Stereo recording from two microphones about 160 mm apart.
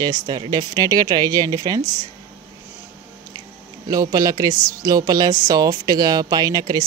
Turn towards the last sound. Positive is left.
turn(degrees=-25)  # may be behind; listen again after turning